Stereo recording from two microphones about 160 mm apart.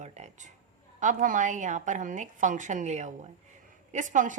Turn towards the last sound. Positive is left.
turn(degrees=-50)  # may be behind; listen again after turning